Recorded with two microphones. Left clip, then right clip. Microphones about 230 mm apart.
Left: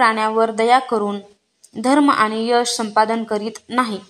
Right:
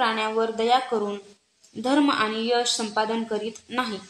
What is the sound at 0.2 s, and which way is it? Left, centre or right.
A woman's voice, left.